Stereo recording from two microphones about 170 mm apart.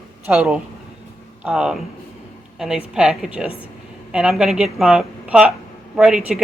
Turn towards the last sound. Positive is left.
turn(degrees=-5)  # may be behind; listen again after turning